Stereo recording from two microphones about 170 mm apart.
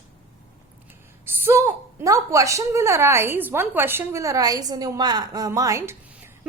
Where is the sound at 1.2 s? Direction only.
15° right (ahead or behind).